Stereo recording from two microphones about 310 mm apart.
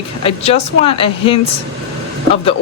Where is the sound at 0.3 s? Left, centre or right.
Centre.